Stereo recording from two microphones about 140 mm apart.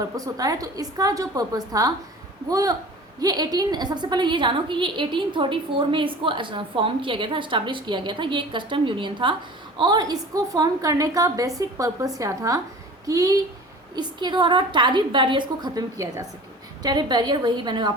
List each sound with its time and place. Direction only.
0.0 s a woman's voice: 25° right (ahead or behind)